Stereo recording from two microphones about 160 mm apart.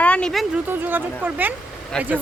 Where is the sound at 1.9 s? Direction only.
5° left (ahead or behind).